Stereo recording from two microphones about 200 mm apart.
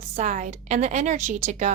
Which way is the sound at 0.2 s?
40° right (ahead or behind).